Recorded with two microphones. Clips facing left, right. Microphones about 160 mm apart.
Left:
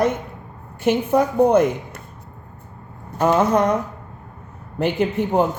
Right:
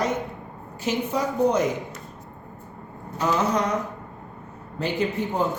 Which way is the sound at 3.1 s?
55° left (ahead or behind).